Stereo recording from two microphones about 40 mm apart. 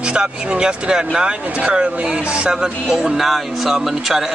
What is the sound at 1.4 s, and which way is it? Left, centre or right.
Speech, right.